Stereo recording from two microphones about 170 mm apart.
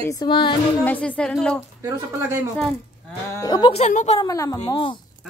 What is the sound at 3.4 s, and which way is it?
Speech, 25° left (ahead or behind).